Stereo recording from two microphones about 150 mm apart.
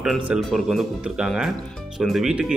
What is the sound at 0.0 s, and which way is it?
Speech, centre (ahead or behind).